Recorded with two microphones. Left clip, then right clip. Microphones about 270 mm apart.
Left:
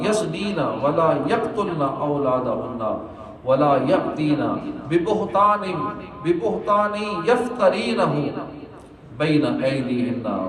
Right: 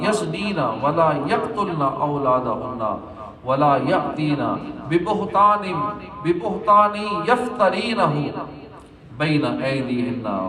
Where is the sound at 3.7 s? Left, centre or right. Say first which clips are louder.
Even; centre.